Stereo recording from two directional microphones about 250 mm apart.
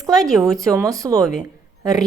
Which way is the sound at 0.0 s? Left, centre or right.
Centre.